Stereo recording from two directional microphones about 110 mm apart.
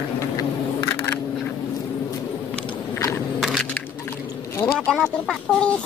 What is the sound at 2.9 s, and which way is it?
Biting, 25° left (ahead or behind).